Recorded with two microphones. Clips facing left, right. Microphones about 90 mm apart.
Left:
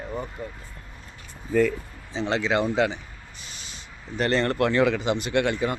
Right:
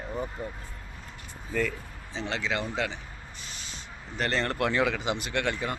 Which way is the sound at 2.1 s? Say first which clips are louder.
Left 7 dB; 25° left (ahead or behind).